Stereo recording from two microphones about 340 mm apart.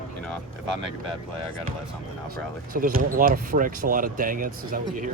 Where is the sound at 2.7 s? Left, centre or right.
Right.